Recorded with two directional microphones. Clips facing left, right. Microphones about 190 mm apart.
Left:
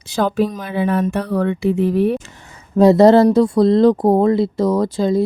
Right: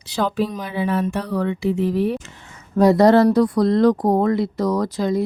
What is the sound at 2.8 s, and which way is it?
Speech, 25° left (ahead or behind).